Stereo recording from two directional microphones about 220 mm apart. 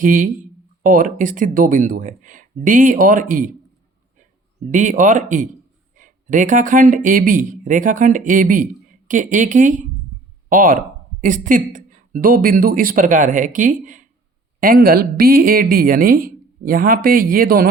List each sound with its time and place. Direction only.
0.0 s speech: 40° right (ahead or behind)
4.6 s speech: 35° right (ahead or behind)